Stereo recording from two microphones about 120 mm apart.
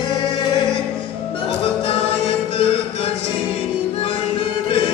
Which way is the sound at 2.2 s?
50° left (ahead or behind).